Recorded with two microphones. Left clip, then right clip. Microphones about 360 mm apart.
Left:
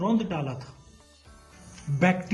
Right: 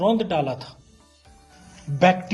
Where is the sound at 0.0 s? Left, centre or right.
Centre.